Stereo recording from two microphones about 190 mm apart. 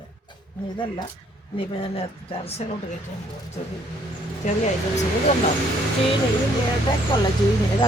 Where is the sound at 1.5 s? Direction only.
30° left (ahead or behind).